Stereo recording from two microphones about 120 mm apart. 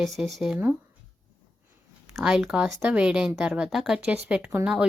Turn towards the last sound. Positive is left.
turn(degrees=-10)  # may be behind; listen again after turning